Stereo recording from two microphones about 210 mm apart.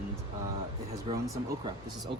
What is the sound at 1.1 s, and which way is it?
Speech, 25° right (ahead or behind).